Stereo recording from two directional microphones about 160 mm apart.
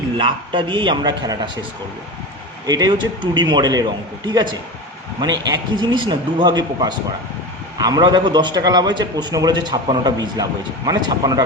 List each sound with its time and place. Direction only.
0.2 s a man's voice: 30° right (ahead or behind)
2.6 s a man's voice: 25° right (ahead or behind)
5.2 s a man's voice: 25° right (ahead or behind)